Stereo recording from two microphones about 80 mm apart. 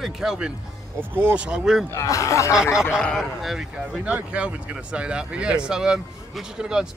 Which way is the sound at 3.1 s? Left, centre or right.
Centre.